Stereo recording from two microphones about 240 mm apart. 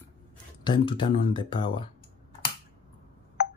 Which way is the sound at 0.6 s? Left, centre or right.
Centre.